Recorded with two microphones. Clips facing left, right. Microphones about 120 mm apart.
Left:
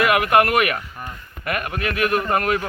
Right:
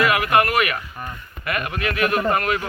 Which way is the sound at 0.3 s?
50° left (ahead or behind).